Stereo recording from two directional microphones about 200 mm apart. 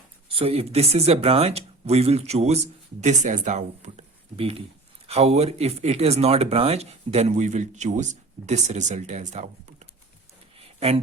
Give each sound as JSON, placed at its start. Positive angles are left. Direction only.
{"t": 0.3, "sound": "speech", "side_deg": -30}
{"t": 10.8, "sound": "speech", "side_deg": -30}